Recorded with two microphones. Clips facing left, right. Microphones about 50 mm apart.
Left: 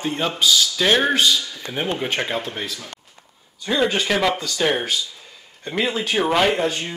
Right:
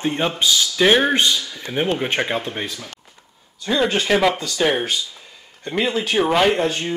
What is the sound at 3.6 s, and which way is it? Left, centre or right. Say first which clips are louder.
Speech: right 1 dB; centre.